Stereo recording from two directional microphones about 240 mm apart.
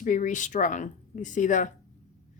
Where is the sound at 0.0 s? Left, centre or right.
Left.